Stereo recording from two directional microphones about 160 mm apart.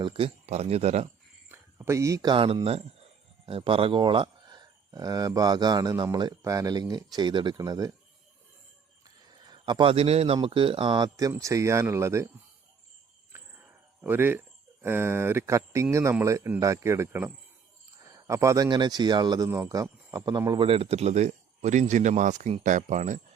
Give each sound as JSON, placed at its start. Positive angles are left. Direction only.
{"t": 0.0, "sound": "speech", "side_deg": -35}
{"t": 1.5, "sound": "speech", "side_deg": -15}
{"t": 9.0, "sound": "speech", "side_deg": -25}
{"t": 13.3, "sound": "speech", "side_deg": -15}